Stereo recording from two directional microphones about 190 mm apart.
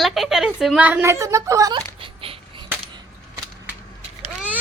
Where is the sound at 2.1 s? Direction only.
30° right (ahead or behind).